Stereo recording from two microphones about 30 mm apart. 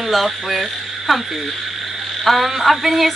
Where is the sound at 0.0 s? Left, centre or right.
Centre.